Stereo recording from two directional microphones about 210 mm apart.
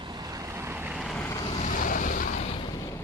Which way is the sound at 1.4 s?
30° left (ahead or behind).